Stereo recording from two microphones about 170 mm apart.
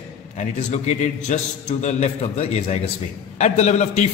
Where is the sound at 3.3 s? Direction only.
40° left (ahead or behind).